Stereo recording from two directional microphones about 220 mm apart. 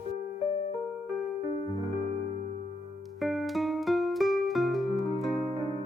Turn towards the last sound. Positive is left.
turn(degrees=0)  # may be behind; listen again after turning